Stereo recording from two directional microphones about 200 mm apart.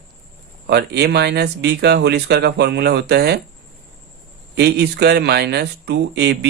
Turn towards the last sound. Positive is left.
turn(degrees=-55)  # may be behind; listen again after turning